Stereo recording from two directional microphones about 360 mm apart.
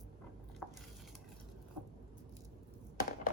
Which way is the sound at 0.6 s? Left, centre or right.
Centre.